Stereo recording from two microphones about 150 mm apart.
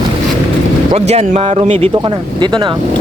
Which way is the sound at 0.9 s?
45° right (ahead or behind).